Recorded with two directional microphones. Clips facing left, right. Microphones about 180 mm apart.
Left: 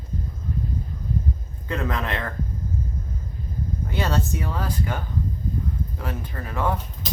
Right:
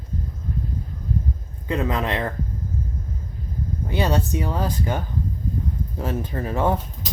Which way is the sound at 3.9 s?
15° right (ahead or behind).